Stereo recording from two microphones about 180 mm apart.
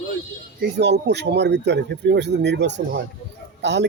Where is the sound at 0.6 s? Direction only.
75° right (ahead or behind).